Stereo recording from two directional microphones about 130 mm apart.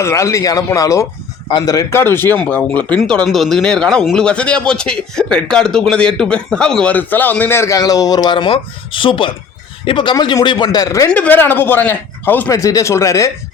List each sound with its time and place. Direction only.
0.0 s a man's voice: 25° left (ahead or behind)
11.1 s a man's voice: 10° left (ahead or behind)
12.5 s a man's voice: 25° left (ahead or behind)